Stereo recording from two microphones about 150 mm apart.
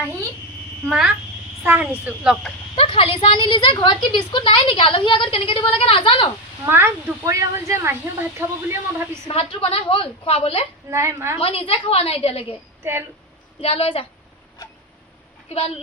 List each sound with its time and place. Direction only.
0.9 s speech: 5° right (ahead or behind)
2.7 s a woman's voice: 35° left (ahead or behind)
6.7 s speech: 15° right (ahead or behind)
9.2 s a woman's voice: 35° left (ahead or behind)
10.9 s speech: 20° right (ahead or behind)
11.3 s a woman's voice: 40° left (ahead or behind)
12.8 s a woman's voice: 15° right (ahead or behind)
13.6 s a woman's voice: 40° left (ahead or behind)